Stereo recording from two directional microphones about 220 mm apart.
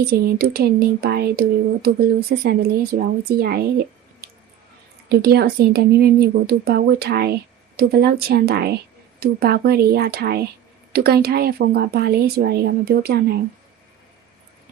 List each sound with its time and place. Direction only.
0.0 s speech: 45° right (ahead or behind)
4.2 s squish: 45° right (ahead or behind)
5.0 s speech: 45° right (ahead or behind)